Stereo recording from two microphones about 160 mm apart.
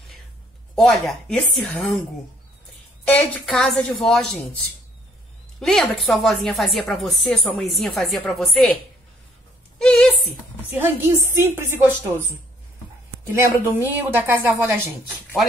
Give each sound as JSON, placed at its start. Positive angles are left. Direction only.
{"t": 0.7, "sound": "a woman's voice", "side_deg": 0}
{"t": 3.1, "sound": "a woman's voice", "side_deg": 5}
{"t": 5.6, "sound": "a woman's voice", "side_deg": 0}
{"t": 9.8, "sound": "speech", "side_deg": 5}
{"t": 10.7, "sound": "speech", "side_deg": -15}
{"t": 13.2, "sound": "speech", "side_deg": -15}